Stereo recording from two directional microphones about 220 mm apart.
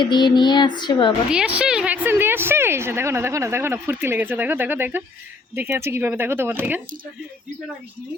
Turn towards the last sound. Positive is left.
turn(degrees=-10)  # may be behind; listen again after turning